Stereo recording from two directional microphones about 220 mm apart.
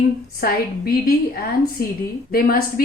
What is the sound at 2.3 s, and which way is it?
Speech, 45° left (ahead or behind).